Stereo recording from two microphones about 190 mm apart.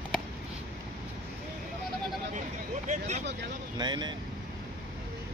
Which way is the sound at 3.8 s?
25° right (ahead or behind).